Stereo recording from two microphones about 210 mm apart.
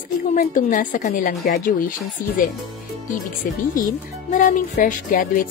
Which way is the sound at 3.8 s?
40° left (ahead or behind).